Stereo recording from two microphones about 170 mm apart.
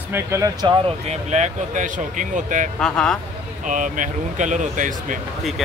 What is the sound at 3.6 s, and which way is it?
Speech, 50° right (ahead or behind).